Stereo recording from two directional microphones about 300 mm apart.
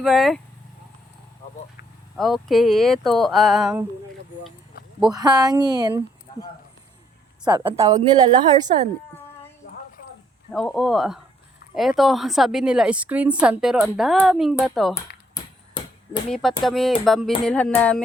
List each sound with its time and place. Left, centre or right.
0.0 s a woman's voice: centre
2.1 s a woman's voice: centre
5.1 s speech: centre
7.4 s speech: centre
10.5 s a woman's voice: centre
15.8 s chop: centre
16.3 s a woman's voice: centre